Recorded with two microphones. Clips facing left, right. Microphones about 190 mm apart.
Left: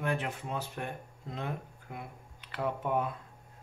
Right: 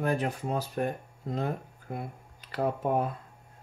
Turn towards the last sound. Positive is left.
turn(degrees=-40)  # may be behind; listen again after turning